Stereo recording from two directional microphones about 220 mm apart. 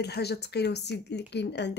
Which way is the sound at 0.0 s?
50° left (ahead or behind).